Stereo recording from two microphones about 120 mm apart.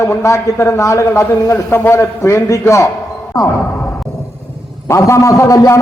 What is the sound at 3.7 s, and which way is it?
Music, 25° left (ahead or behind).